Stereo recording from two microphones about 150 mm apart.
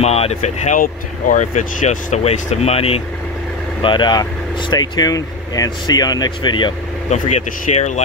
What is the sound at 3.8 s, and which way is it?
Speech, 30° left (ahead or behind).